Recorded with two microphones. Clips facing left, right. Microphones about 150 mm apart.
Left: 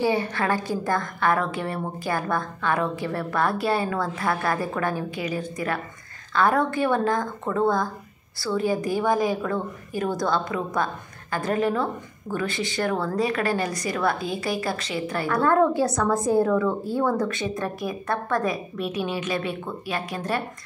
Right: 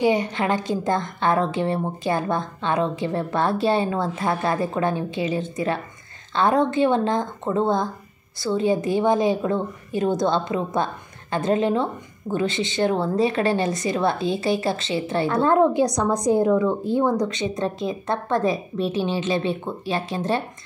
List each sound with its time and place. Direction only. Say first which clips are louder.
0.0 s a woman's voice: right 3 dB; 20° right (ahead or behind)